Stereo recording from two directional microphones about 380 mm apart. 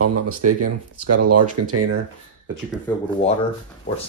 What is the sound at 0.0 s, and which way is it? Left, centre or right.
Speech, right.